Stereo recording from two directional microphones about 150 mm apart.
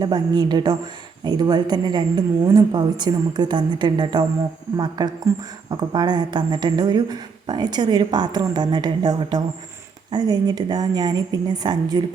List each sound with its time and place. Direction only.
0.0 s a woman's voice: 30° right (ahead or behind)